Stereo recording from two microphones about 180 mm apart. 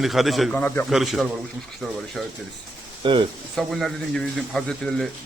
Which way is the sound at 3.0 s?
25° right (ahead or behind).